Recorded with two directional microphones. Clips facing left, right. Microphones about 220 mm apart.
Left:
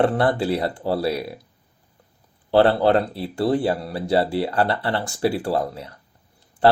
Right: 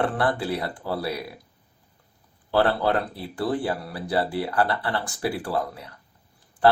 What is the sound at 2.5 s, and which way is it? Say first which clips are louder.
Speech: left 6 dB; 30° left (ahead or behind).